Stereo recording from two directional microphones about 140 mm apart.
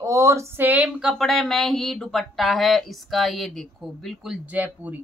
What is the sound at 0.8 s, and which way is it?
Speech, centre (ahead or behind).